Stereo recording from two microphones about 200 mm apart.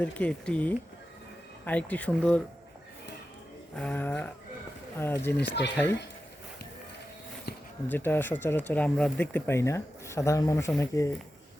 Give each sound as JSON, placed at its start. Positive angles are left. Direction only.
{"t": 0.0, "sound": "speech", "side_deg": 5}
{"t": 3.8, "sound": "a sound", "side_deg": 5}
{"t": 4.9, "sound": "speech", "side_deg": 10}
{"t": 5.5, "sound": "speech", "side_deg": 60}
{"t": 7.9, "sound": "speech", "side_deg": 10}